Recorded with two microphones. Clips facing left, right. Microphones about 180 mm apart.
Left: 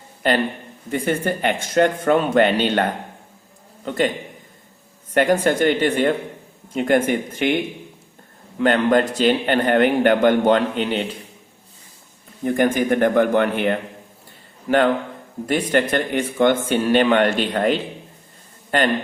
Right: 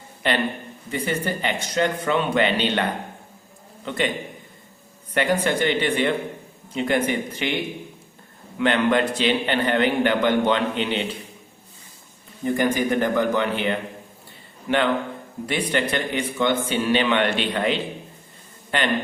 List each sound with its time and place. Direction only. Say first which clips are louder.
0.2 s a man's voice: left 3 dB; 40° left (ahead or behind)
5.1 s a man's voice: left 4 dB; 45° left (ahead or behind)
8.5 s a man's voice: left 3 dB; 40° left (ahead or behind)
12.5 s a man's voice: left 3 dB; 55° left (ahead or behind)
15.4 s a man's voice: left 5 dB; 45° left (ahead or behind)